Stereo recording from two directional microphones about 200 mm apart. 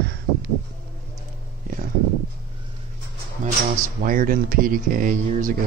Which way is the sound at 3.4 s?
40° right (ahead or behind).